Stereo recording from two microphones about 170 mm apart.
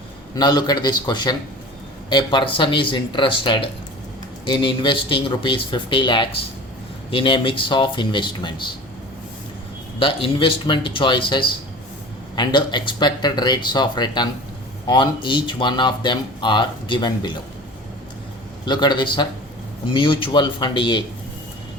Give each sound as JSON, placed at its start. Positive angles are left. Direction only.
{"t": 0.3, "sound": "speech", "side_deg": 25}
{"t": 10.0, "sound": "speech", "side_deg": 30}
{"t": 18.6, "sound": "speech", "side_deg": 25}